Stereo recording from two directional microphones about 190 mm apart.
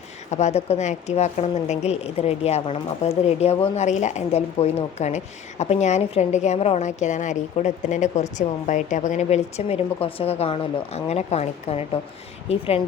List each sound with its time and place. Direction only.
0.3 s a woman's voice: 35° left (ahead or behind)